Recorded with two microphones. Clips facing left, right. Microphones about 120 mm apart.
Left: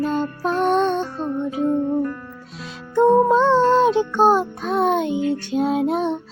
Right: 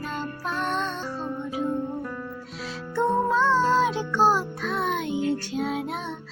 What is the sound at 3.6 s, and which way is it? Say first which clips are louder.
Music: left 6 dB; 60° left (ahead or behind).